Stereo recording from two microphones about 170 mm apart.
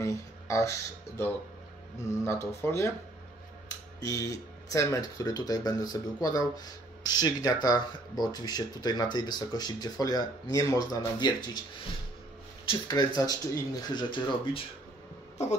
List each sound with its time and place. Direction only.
0.0 s music: 20° left (ahead or behind)
2.0 s speech: 15° left (ahead or behind)
4.0 s speech: 20° left (ahead or behind)
12.6 s speech: 25° left (ahead or behind)